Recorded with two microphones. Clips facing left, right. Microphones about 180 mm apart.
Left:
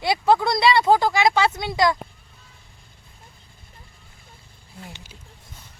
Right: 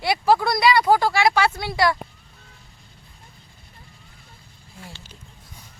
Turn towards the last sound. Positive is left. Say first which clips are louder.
# left 1 dB
turn(degrees=15)  # may be behind; listen again after turning